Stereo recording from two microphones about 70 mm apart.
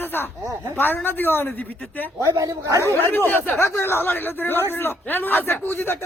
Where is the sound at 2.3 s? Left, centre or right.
Right.